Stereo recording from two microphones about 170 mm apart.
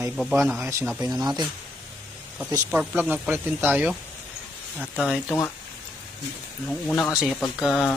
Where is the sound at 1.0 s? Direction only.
20° right (ahead or behind).